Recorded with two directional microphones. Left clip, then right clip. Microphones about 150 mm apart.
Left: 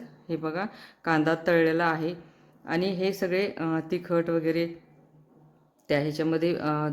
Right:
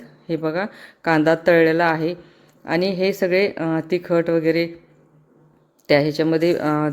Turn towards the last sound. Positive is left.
turn(degrees=-25)  # may be behind; listen again after turning